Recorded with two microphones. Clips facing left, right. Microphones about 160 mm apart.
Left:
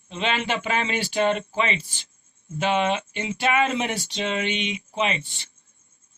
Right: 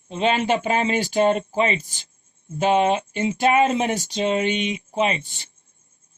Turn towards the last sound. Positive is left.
turn(degrees=-45)  # may be behind; listen again after turning